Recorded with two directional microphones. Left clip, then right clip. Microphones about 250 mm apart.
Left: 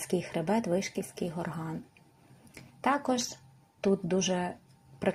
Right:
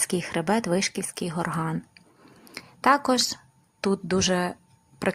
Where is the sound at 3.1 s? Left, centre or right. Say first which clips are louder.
Right 9 dB; right.